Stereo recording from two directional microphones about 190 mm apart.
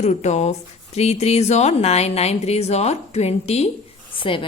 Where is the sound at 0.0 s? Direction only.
35° left (ahead or behind).